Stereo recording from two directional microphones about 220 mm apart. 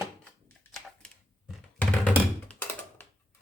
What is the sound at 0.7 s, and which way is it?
Thunk, 5° left (ahead or behind).